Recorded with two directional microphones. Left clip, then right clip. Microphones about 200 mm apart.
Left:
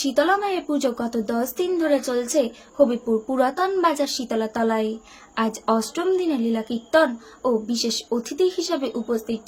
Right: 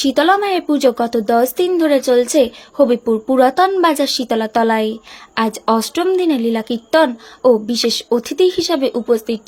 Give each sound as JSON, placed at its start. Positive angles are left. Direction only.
{"t": 0.0, "sound": "a woman's voice", "side_deg": -40}